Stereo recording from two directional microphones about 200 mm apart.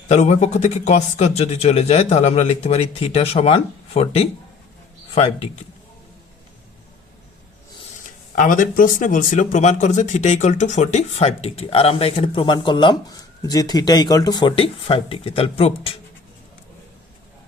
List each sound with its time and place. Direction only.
0.1 s speech: 35° left (ahead or behind)
8.4 s speech: 40° left (ahead or behind)